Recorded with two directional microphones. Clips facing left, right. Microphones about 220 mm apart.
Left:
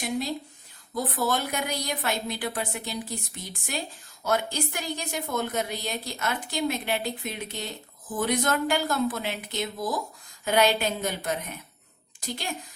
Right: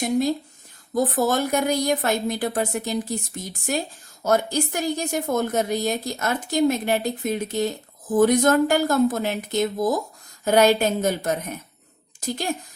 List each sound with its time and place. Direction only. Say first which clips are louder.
0.0 s a woman's voice: right 8 dB; 45° right (ahead or behind)